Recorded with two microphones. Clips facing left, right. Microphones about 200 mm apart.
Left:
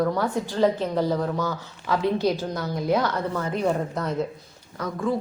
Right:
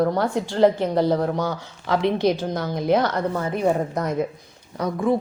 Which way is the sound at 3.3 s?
10° right (ahead or behind).